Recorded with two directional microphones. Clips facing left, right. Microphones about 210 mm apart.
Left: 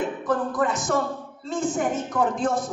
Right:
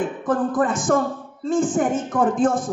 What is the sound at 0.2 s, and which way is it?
A woman's voice, 50° right (ahead or behind).